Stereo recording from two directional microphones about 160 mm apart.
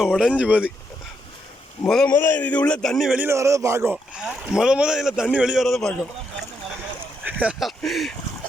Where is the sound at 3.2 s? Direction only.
20° right (ahead or behind).